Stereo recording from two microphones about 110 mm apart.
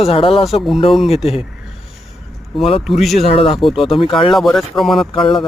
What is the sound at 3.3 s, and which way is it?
Speech, 60° left (ahead or behind).